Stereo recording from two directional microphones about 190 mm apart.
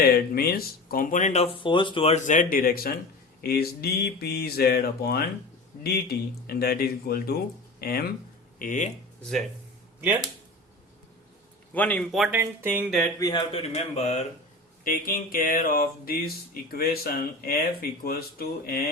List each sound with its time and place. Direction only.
0.3 s speech: 50° left (ahead or behind)
11.7 s a man's voice: 10° left (ahead or behind)
13.1 s a man's voice: 20° left (ahead or behind)
14.8 s speech: 50° left (ahead or behind)